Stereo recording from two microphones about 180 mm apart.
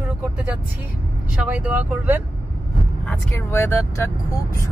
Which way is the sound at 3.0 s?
15° left (ahead or behind).